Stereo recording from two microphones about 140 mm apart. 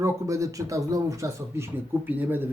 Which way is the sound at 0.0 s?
20° right (ahead or behind).